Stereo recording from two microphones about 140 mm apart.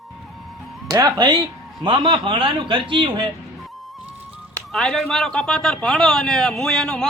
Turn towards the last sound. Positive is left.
turn(degrees=5)  # may be behind; listen again after turning